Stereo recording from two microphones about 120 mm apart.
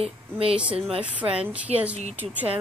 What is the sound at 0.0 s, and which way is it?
Speech, 55° right (ahead or behind).